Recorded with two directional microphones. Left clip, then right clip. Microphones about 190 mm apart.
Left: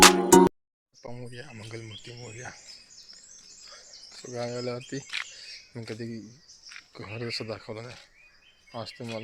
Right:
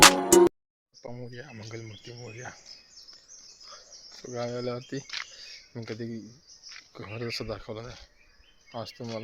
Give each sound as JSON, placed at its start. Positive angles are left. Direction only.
{"t": 0.0, "sound": "music", "side_deg": 0}
{"t": 1.0, "sound": "speech", "side_deg": 0}
{"t": 3.7, "sound": "speech", "side_deg": 0}
{"t": 5.3, "sound": "camera", "side_deg": 0}
{"t": 5.9, "sound": "speech", "side_deg": 0}